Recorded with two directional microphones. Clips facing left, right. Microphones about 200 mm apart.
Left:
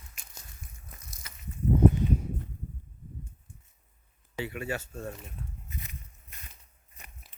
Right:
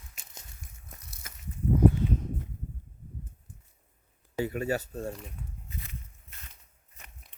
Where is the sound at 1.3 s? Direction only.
50° right (ahead or behind).